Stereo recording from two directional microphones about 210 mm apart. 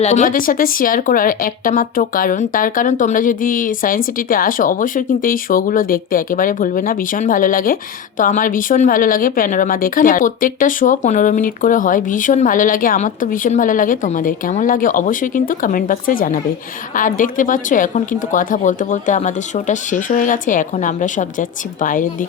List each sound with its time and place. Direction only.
0.0 s a woman's voice: 35° left (ahead or behind)